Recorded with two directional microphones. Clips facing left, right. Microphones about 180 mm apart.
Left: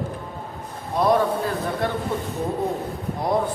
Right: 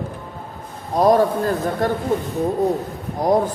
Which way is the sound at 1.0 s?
45° right (ahead or behind).